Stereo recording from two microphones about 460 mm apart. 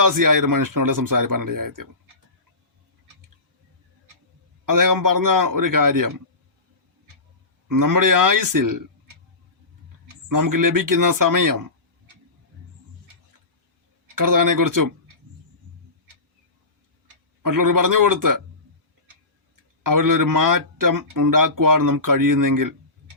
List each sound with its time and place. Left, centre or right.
0.0 s speech: right
4.6 s speech: right
7.7 s speech: right
10.2 s speech: right
14.2 s speech: right
17.4 s speech: right
19.8 s speech: right